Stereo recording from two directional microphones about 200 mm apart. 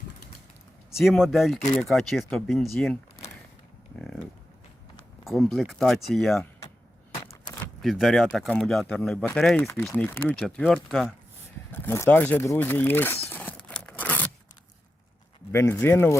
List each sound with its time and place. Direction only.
0.9 s speech: centre (ahead or behind)
3.9 s a sound: 5° left (ahead or behind)
5.2 s speech: centre (ahead or behind)
7.3 s a sound: 15° left (ahead or behind)
7.8 s speech: centre (ahead or behind)
11.7 s speech: 10° left (ahead or behind)
13.2 s tearing: 10° left (ahead or behind)
15.5 s speech: 15° left (ahead or behind)